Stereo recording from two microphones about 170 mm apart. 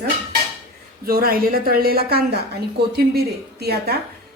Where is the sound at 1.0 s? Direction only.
60° right (ahead or behind).